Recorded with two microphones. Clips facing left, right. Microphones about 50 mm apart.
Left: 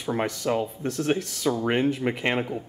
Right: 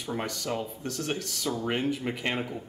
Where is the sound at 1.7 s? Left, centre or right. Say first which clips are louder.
Left 5 dB; centre.